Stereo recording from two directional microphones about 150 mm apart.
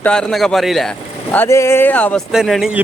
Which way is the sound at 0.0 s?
5° left (ahead or behind).